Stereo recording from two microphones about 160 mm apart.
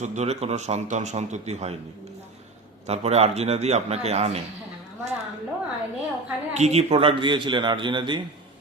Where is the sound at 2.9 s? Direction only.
40° right (ahead or behind).